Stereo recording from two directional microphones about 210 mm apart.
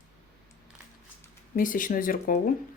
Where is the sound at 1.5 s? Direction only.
40° left (ahead or behind).